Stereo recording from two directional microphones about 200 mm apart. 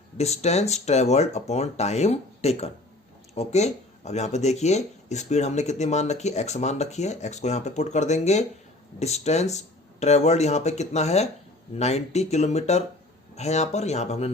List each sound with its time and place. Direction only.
0.2 s speech: 30° left (ahead or behind)